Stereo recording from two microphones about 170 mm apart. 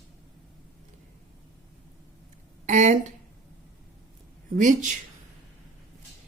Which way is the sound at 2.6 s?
45° right (ahead or behind).